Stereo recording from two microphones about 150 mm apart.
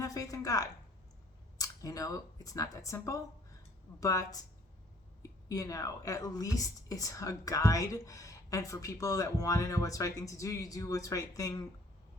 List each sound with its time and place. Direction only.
0.0 s a woman's voice: 25° left (ahead or behind)
5.5 s a woman's voice: 25° left (ahead or behind)